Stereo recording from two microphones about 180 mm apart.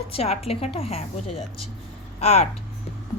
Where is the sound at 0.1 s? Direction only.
35° left (ahead or behind).